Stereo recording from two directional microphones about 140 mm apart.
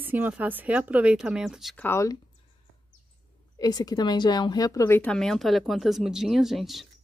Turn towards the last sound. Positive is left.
turn(degrees=0)  # may be behind; listen again after turning